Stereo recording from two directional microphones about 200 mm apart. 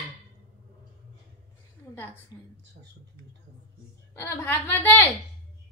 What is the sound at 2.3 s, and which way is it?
Speech, 20° left (ahead or behind).